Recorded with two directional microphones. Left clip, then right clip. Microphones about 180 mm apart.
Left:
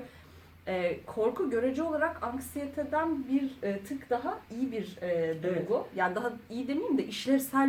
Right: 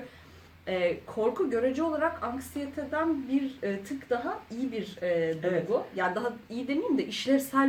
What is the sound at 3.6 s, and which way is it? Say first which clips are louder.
Speech: right 2 dB; 10° left (ahead or behind).